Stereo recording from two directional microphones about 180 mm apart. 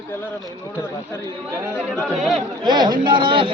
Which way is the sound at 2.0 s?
Centre (ahead or behind).